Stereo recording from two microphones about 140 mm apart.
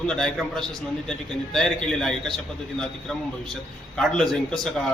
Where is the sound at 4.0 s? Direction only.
5° left (ahead or behind).